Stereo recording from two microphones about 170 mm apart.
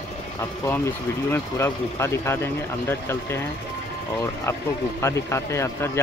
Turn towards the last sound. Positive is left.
turn(degrees=15)  # may be behind; listen again after turning